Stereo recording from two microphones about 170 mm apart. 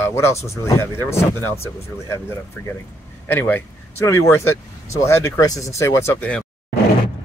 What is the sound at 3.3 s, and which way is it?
Speech, 10° left (ahead or behind).